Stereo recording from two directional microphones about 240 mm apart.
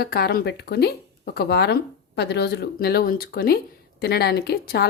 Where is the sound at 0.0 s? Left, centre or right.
Left.